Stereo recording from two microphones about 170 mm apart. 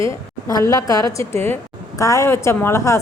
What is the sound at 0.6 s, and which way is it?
A woman's voice, 20° left (ahead or behind).